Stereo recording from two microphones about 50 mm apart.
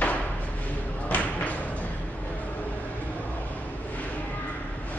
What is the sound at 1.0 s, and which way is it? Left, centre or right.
Thump, left.